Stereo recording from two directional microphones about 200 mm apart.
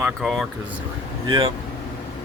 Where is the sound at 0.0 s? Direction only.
Centre (ahead or behind).